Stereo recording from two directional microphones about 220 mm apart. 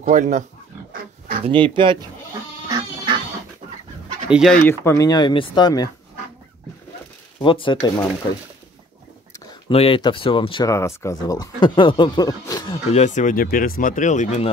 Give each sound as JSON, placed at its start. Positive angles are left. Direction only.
{"t": 0.0, "sound": "speech", "side_deg": -35}
{"t": 1.4, "sound": "speech", "side_deg": -20}
{"t": 4.3, "sound": "speech", "side_deg": 0}
{"t": 4.6, "sound": "speech", "side_deg": 15}
{"t": 7.4, "sound": "speech", "side_deg": 20}
{"t": 9.3, "sound": "speech", "side_deg": 20}
{"t": 12.9, "sound": "speech", "side_deg": 35}